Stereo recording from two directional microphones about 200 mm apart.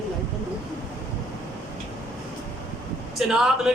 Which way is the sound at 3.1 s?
Centre (ahead or behind).